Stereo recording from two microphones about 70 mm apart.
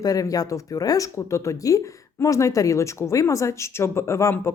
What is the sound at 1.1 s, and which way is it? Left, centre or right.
Speech, left.